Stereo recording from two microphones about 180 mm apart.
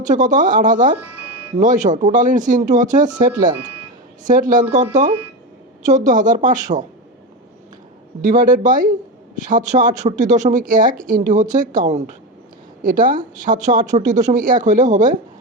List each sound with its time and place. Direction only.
0.0 s speech: 45° right (ahead or behind)
0.9 s music: 10° right (ahead or behind)
1.5 s speech: 45° right (ahead or behind)
5.8 s speech: 45° right (ahead or behind)
8.2 s speech: 45° right (ahead or behind)